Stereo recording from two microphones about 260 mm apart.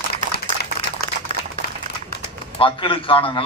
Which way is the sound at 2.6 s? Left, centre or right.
Centre.